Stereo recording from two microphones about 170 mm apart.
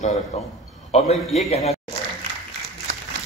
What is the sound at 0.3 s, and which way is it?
Speech, 40° left (ahead or behind).